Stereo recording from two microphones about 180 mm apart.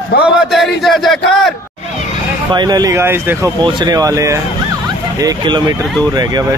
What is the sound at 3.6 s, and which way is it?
Speech, 25° right (ahead or behind).